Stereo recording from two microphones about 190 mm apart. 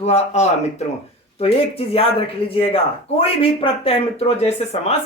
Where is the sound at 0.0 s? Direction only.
35° left (ahead or behind).